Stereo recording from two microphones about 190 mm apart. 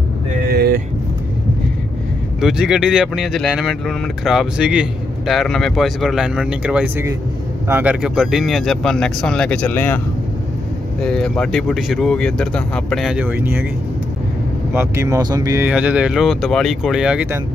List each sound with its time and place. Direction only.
0.5 s vehicle: 55° right (ahead or behind)
2.4 s speech: 5° right (ahead or behind)
11.0 s speech: 5° left (ahead or behind)
14.7 s speech: 10° right (ahead or behind)
15.7 s speech: 5° right (ahead or behind)